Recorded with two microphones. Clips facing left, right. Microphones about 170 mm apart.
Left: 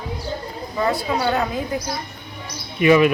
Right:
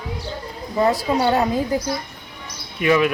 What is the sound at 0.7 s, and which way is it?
A woman's voice, 35° right (ahead or behind).